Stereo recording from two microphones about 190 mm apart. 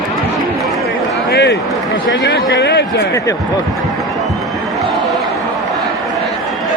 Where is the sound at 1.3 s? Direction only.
60° left (ahead or behind).